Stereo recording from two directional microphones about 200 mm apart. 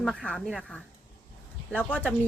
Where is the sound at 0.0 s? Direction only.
5° left (ahead or behind).